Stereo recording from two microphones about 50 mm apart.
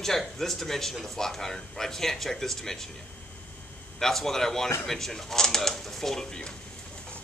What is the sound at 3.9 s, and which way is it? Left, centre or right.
Speech, centre.